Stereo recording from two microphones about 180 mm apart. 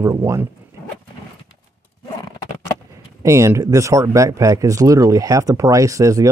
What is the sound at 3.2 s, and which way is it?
Speech, 15° right (ahead or behind).